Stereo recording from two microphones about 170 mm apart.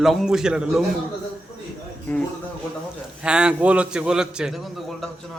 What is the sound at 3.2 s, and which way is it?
A man's voice, 5° right (ahead or behind).